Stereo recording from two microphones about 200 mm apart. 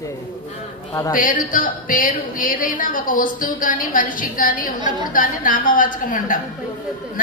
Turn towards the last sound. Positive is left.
turn(degrees=45)  # may be behind; listen again after turning